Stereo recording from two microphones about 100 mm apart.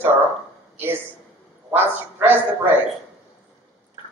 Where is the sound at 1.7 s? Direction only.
20° right (ahead or behind).